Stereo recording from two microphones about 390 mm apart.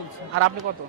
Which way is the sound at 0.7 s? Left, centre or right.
Right.